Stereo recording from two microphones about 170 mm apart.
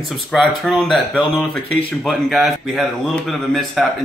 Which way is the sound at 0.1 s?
Centre (ahead or behind).